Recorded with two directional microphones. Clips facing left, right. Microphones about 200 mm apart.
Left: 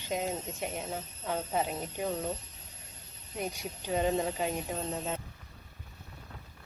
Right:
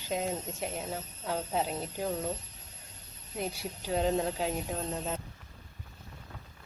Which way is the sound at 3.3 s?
5° right (ahead or behind).